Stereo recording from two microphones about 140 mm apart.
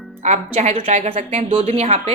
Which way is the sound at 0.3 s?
55° right (ahead or behind).